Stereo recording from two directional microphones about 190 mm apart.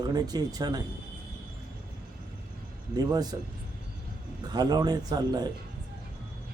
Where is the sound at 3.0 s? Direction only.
20° right (ahead or behind).